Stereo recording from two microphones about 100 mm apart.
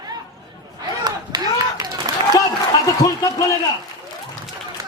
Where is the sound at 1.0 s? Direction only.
40° right (ahead or behind).